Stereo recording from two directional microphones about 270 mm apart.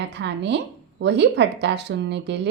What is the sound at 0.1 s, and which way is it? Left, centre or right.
Speech, right.